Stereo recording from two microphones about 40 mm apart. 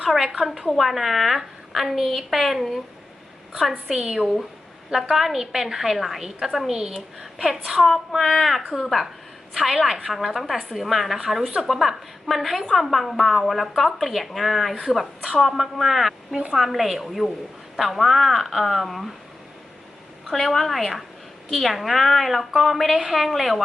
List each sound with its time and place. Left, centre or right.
0.0 s a woman's voice: centre
3.9 s a woman's voice: centre
5.1 s a woman's voice: centre
20.3 s a woman's voice: centre